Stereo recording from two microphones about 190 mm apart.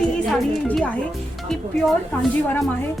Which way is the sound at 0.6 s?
10° left (ahead or behind).